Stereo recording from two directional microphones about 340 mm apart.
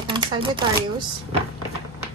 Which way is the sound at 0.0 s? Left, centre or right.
Centre.